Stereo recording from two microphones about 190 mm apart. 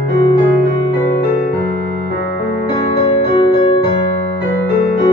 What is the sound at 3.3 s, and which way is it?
Music, 20° left (ahead or behind).